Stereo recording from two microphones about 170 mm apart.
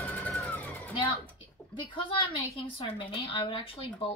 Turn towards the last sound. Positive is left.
turn(degrees=35)  # may be behind; listen again after turning